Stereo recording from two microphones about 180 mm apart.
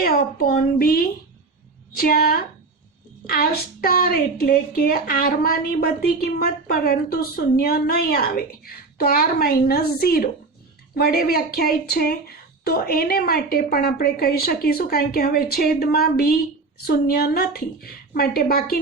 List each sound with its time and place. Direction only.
0.0 s speech: 55° left (ahead or behind)